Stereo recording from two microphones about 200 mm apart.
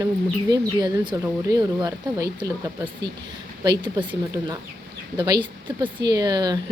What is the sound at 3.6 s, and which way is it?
Speech, 25° right (ahead or behind).